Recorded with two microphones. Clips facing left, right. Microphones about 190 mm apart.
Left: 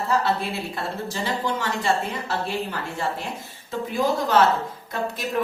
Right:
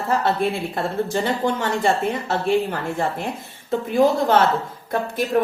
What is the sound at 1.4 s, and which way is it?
Speech, 45° right (ahead or behind).